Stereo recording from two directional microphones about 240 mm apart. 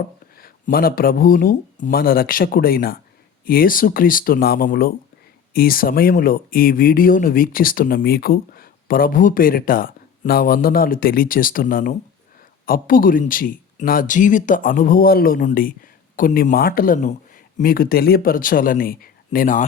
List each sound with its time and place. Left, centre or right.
0.3 s speech: left